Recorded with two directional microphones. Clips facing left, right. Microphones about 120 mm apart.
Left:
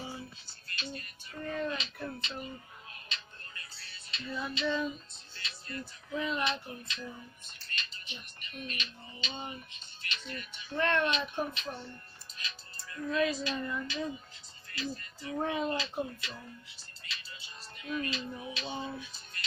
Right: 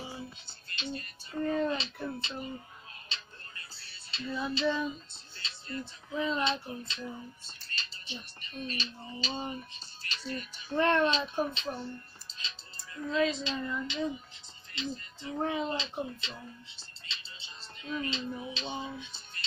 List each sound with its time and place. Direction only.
0.5 s speech: 25° right (ahead or behind)
3.1 s music: 30° right (ahead or behind)
4.8 s speech: 30° right (ahead or behind)
10.0 s music: 35° right (ahead or behind)
11.0 s speech: 30° right (ahead or behind)
12.3 s music: 30° right (ahead or behind)
14.8 s speech: 25° right (ahead or behind)
18.9 s music: 25° right (ahead or behind)